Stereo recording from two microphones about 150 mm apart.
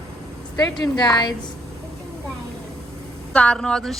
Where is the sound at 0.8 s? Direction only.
30° left (ahead or behind).